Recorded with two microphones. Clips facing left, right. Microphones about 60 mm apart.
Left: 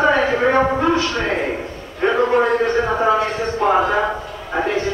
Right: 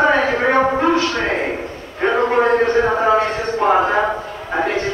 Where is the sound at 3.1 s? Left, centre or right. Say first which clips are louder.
Right 2 dB; right.